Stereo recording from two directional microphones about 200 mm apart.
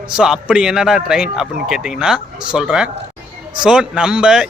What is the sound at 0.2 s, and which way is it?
Speech, 5° right (ahead or behind).